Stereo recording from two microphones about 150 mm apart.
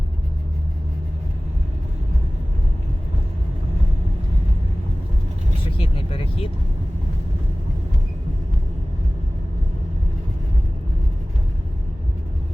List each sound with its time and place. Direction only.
5.7 s vehicle: 35° left (ahead or behind)